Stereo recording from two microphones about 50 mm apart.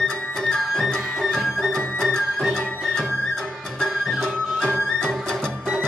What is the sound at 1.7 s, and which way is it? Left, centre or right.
Music, centre.